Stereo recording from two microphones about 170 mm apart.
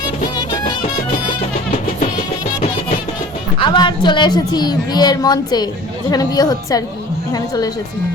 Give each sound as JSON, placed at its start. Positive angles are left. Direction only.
{"t": 0.3, "sound": "music", "side_deg": 25}
{"t": 3.6, "sound": "a woman's voice", "side_deg": 25}